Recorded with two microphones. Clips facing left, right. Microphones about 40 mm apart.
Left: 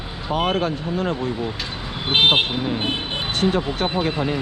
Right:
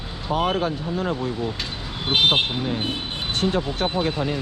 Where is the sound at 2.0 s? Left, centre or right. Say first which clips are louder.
Left 2 dB; centre.